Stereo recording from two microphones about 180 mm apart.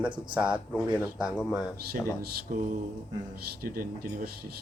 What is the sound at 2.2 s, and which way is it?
Speech, 50° right (ahead or behind).